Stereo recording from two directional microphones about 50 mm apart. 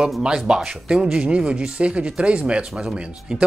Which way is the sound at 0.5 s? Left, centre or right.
Centre.